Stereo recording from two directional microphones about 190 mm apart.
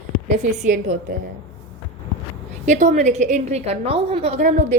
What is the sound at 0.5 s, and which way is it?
Speech, 40° right (ahead or behind).